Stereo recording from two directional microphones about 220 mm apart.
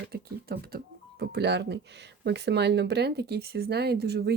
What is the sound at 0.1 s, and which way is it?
Speech, 45° right (ahead or behind).